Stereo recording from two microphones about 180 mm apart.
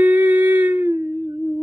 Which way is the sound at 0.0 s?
10° right (ahead or behind).